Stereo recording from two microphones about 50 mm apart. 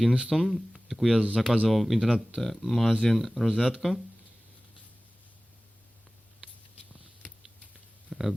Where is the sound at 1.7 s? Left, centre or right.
Centre.